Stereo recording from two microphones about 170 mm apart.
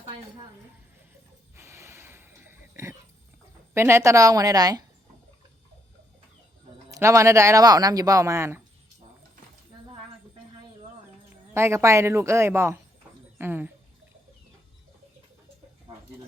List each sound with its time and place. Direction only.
1.5 s a sound: 15° right (ahead or behind)
3.8 s speech: 15° right (ahead or behind)
6.9 s speech: 20° right (ahead or behind)
11.5 s speech: 15° right (ahead or behind)